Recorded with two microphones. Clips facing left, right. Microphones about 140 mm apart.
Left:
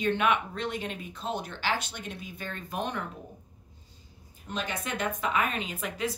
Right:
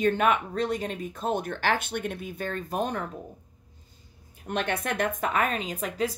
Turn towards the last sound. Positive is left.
turn(degrees=-40)  # may be behind; listen again after turning